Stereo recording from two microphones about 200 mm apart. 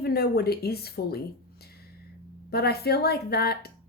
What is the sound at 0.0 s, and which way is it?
Speech, 50° left (ahead or behind).